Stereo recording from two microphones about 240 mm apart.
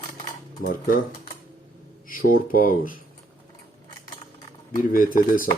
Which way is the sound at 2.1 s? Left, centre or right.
Left.